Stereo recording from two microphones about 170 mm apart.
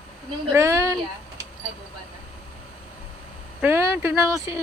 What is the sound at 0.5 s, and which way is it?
Speech, 15° right (ahead or behind).